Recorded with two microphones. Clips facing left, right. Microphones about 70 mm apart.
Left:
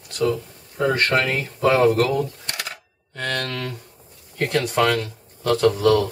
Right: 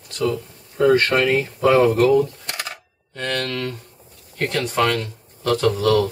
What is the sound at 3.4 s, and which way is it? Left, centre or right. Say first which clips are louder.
Speech: right 3 dB; centre.